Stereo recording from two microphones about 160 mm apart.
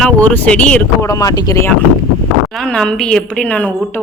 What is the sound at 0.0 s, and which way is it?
Speech, 10° left (ahead or behind).